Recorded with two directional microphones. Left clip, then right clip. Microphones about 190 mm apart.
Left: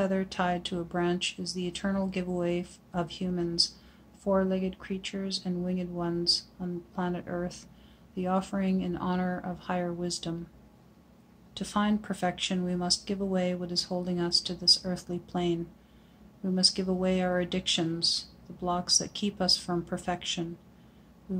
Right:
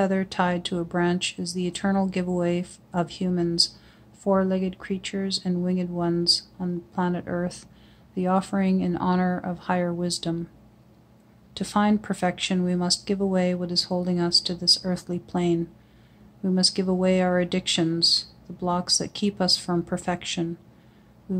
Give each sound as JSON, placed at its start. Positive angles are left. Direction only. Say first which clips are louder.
{"t": 0.0, "sound": "speech", "louder": "right 5 dB", "side_deg": -45}
{"t": 11.5, "sound": "speech", "louder": "right 6 dB", "side_deg": -45}